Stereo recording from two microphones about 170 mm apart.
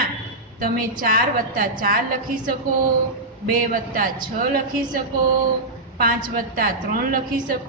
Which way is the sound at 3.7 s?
55° right (ahead or behind).